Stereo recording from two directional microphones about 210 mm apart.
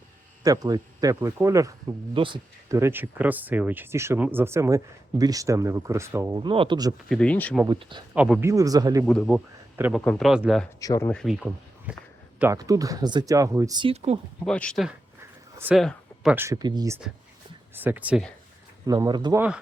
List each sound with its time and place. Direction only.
0.4 s speech: 15° right (ahead or behind)
7.1 s a man's voice: 5° left (ahead or behind)
7.7 s speech: 20° right (ahead or behind)
8.1 s speech: 5° right (ahead or behind)
9.0 s a man's voice: centre (ahead or behind)
9.7 s a man's voice: 10° right (ahead or behind)
10.0 s a man's voice: 5° left (ahead or behind)
10.8 s speech: 15° left (ahead or behind)
11.1 s a man's voice: centre (ahead or behind); by 14.2 s 30° right (ahead or behind)
14.4 s a man's voice: 5° left (ahead or behind)
15.5 s speech: 10° right (ahead or behind)
15.8 s a sound: centre (ahead or behind)
16.3 s speech: 15° right (ahead or behind)
18.9 s speech: 20° right (ahead or behind)